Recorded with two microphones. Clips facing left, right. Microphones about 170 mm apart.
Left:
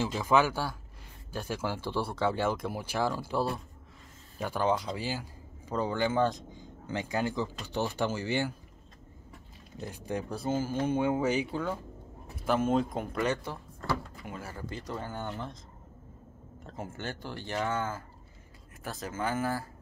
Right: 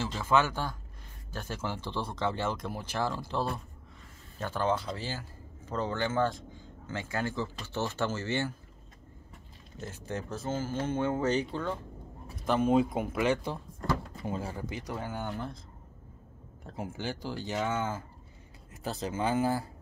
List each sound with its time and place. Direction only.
0.0 s a man's voice: 15° left (ahead or behind)
9.8 s speech: 15° left (ahead or behind); by 15.5 s 5° right (ahead or behind)
16.6 s speech: 10° right (ahead or behind)